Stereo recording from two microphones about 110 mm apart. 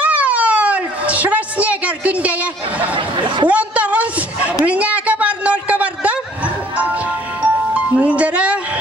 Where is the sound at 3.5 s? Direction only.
10° right (ahead or behind).